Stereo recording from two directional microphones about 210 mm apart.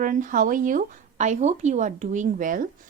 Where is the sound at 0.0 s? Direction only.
40° right (ahead or behind).